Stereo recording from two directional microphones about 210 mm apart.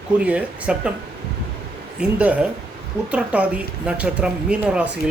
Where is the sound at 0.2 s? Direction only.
5° right (ahead or behind).